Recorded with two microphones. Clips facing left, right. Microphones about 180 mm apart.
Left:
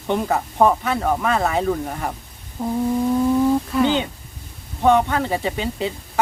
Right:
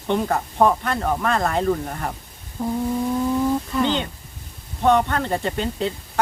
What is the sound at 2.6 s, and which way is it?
Humming, 20° left (ahead or behind).